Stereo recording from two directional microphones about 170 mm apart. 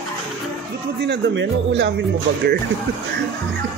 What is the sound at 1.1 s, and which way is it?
Speech, 90° right.